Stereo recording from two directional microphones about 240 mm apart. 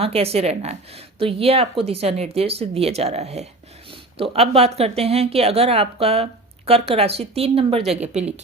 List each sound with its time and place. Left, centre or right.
0.0 s speech: right